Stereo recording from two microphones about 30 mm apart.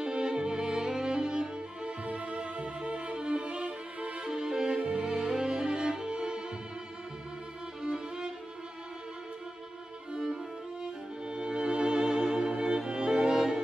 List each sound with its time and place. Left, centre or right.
0.0 s music: right
2.0 s violin: right
4.2 s violin: right
4.8 s music: right
7.8 s violin: right
10.1 s violin: centre
11.2 s music: right